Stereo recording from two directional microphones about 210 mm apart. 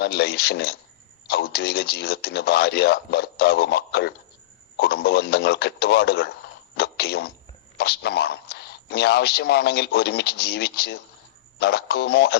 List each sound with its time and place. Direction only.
0.0 s speech: 50° left (ahead or behind)